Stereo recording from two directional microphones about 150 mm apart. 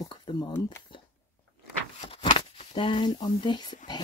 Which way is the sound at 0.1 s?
30° left (ahead or behind).